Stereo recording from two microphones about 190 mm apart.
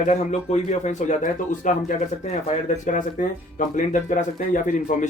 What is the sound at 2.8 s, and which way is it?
Speech, 40° left (ahead or behind).